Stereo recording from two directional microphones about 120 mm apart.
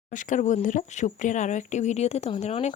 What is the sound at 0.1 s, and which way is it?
Speech, 90° left.